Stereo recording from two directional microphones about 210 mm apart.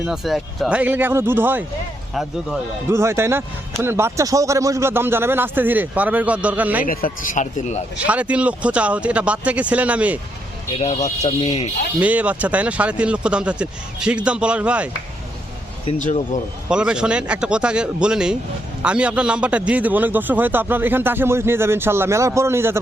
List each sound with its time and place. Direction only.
0.0 s a man's voice: centre (ahead or behind)
2.9 s a man's voice: 10° right (ahead or behind)
6.8 s speech: 45° left (ahead or behind)
7.9 s a man's voice: 5° right (ahead or behind)
10.7 s speech: 30° left (ahead or behind)
11.9 s speech: 5° right (ahead or behind)
15.9 s speech: 35° left (ahead or behind)
16.6 s a man's voice: 5° right (ahead or behind)